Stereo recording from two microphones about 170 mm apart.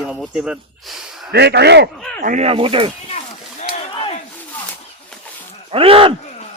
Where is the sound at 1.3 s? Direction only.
75° right (ahead or behind).